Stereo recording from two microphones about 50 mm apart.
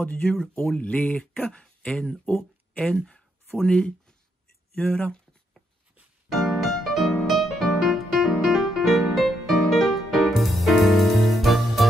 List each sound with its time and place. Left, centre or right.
0.2 s speech: centre
0.7 s speech: centre
2.2 s a sound: left
3.6 s speech: centre
4.8 s speech: left
6.3 s music: centre